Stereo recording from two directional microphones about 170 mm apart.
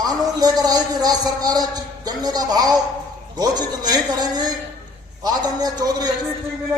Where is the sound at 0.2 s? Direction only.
25° right (ahead or behind).